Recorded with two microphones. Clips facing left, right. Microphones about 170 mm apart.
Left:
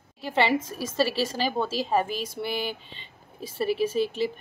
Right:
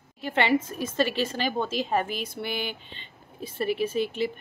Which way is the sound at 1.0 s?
35° left (ahead or behind).